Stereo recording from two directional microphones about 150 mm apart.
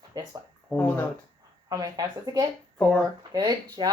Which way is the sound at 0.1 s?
25° right (ahead or behind).